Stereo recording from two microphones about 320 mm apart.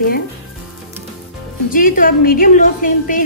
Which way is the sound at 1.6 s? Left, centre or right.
Left.